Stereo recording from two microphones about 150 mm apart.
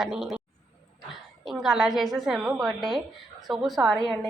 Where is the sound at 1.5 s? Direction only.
Centre (ahead or behind).